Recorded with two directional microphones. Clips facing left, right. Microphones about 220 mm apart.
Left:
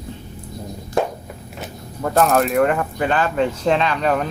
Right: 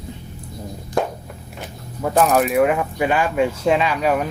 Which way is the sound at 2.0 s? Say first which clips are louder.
Even; 5° right (ahead or behind).